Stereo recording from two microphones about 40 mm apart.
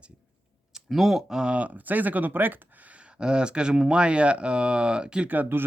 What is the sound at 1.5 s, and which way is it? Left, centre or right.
Speech, right.